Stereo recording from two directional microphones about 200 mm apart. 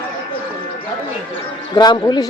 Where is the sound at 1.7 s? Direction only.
20° left (ahead or behind).